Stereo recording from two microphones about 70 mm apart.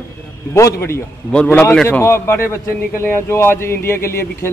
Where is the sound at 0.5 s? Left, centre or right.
Left.